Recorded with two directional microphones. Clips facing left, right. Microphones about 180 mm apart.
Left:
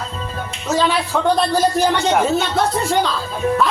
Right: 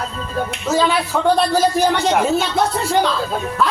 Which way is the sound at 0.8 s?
5° right (ahead or behind).